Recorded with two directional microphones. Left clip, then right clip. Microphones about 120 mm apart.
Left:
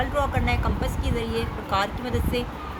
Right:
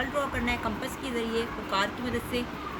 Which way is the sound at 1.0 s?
65° left (ahead or behind).